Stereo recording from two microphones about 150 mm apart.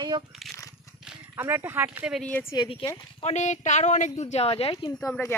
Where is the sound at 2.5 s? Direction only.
35° left (ahead or behind).